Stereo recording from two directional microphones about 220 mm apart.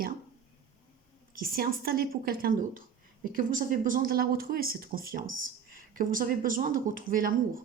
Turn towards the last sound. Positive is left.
turn(degrees=-40)  # may be behind; listen again after turning